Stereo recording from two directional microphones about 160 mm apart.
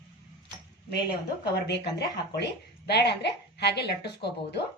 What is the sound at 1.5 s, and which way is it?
Speech, 90° left.